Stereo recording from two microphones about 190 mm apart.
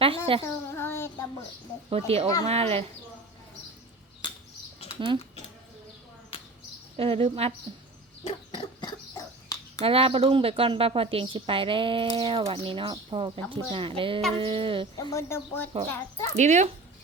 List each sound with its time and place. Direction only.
0.3 s a woman's voice: 30° right (ahead or behind)
0.7 s child singing: 10° left (ahead or behind)
1.9 s speech: 30° right (ahead or behind)
4.9 s speech: 25° right (ahead or behind)
6.9 s speech: 30° right (ahead or behind)
8.3 s dog: 25° left (ahead or behind)
9.8 s a woman's voice: 30° right (ahead or behind)
14.9 s speech: 15° left (ahead or behind)
16.4 s speech: 40° right (ahead or behind)